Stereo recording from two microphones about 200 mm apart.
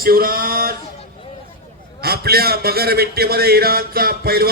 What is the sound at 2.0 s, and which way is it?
A man's voice, 50° right (ahead or behind).